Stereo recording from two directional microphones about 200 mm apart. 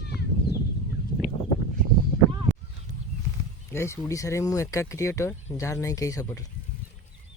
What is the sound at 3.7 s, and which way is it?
Speech, 15° left (ahead or behind).